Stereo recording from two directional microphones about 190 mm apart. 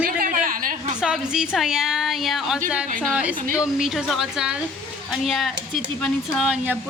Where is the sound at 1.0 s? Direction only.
5° right (ahead or behind).